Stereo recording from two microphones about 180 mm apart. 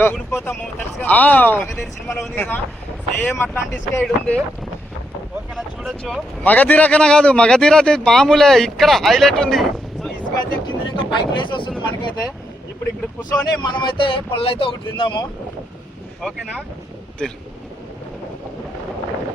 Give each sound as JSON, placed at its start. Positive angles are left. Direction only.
{"t": 0.0, "sound": "speech", "side_deg": 15}
{"t": 1.7, "sound": "speech", "side_deg": 0}
{"t": 2.3, "sound": "speech", "side_deg": 10}
{"t": 5.5, "sound": "speech", "side_deg": 0}
{"t": 10.3, "sound": "speech", "side_deg": 25}
{"t": 13.3, "sound": "speech", "side_deg": 25}
{"t": 16.2, "sound": "speech", "side_deg": 5}